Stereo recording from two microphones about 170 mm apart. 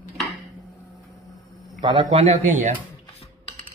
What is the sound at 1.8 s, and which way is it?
Speech, 25° right (ahead or behind).